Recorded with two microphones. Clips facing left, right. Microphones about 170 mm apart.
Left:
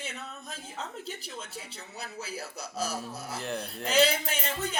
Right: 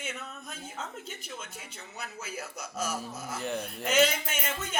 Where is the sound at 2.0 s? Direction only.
35° left (ahead or behind).